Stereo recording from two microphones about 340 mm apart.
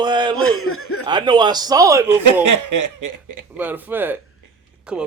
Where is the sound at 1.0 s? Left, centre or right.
Centre.